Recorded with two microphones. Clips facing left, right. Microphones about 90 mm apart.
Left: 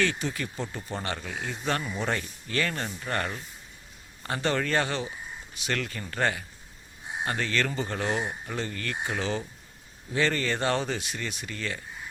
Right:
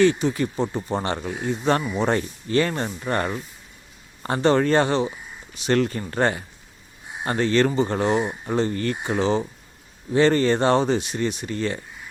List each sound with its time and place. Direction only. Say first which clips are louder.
0.0 s speech: right 10 dB; 20° right (ahead or behind)